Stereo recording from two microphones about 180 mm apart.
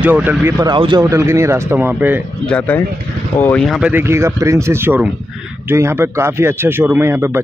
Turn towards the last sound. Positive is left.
turn(degrees=-15)  # may be behind; listen again after turning